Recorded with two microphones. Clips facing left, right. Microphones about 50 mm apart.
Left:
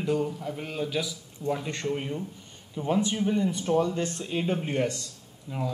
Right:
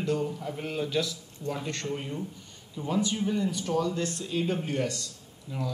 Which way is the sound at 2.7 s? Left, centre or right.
Left.